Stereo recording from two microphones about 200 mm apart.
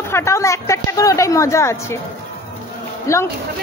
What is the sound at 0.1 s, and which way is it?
A woman's voice, 15° left (ahead or behind).